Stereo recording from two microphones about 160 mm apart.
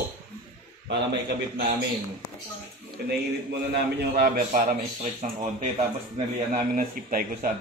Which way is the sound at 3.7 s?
90° right.